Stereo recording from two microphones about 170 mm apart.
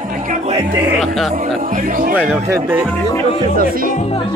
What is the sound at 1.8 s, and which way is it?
Speech, 55° right (ahead or behind).